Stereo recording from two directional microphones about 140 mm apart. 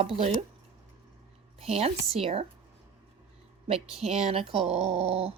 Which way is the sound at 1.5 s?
45° right (ahead or behind).